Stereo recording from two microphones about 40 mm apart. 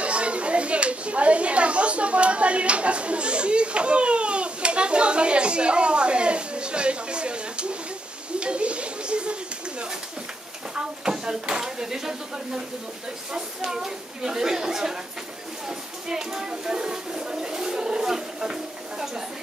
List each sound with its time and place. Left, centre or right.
0.0 s speech: right; by 15.0 s centre
16.1 s speech: centre